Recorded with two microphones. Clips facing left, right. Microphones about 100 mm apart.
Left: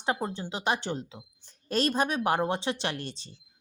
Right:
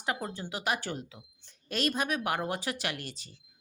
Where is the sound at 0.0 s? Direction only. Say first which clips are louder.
Left 4 dB; 25° left (ahead or behind).